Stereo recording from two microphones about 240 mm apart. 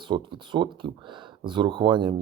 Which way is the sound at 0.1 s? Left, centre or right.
Centre.